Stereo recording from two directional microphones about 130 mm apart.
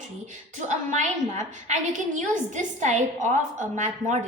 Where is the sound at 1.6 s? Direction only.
70° right (ahead or behind).